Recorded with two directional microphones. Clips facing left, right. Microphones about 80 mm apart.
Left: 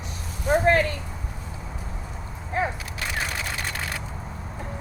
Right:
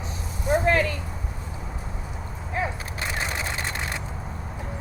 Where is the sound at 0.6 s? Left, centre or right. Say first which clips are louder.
Left 3 dB; left.